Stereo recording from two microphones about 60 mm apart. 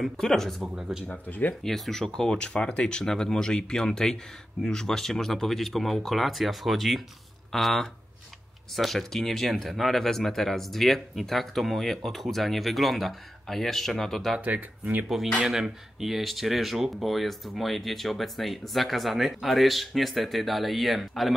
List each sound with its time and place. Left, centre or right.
0.0 s speech: centre
0.7 s speech: centre
1.0 s speech: left
1.6 s speech: centre
14.4 s speech: right
15.4 s speech: centre